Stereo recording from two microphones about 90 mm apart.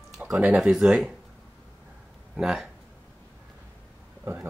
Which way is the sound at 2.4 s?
5° right (ahead or behind).